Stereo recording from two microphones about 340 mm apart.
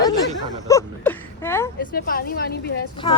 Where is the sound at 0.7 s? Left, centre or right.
Centre.